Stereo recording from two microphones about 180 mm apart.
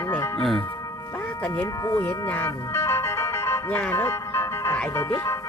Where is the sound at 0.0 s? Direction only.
15° left (ahead or behind).